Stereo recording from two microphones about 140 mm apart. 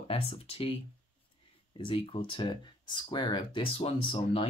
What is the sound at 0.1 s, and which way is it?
Speech, 40° left (ahead or behind).